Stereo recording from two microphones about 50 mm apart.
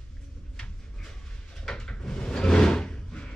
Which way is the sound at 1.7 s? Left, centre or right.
Centre.